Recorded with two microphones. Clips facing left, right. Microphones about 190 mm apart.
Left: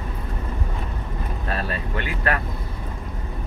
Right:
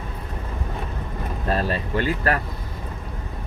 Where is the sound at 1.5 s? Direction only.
35° right (ahead or behind).